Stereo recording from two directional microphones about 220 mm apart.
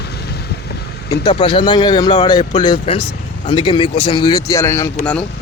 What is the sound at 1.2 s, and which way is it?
Speech, 20° left (ahead or behind).